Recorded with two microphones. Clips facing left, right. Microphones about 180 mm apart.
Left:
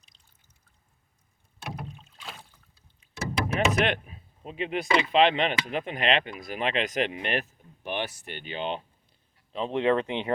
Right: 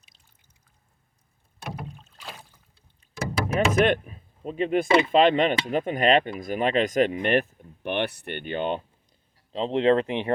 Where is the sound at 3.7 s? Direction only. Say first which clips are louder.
Right 5 dB; 50° right (ahead or behind).